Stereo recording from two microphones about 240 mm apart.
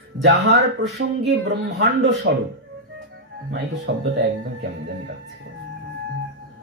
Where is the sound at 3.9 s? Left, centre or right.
Right.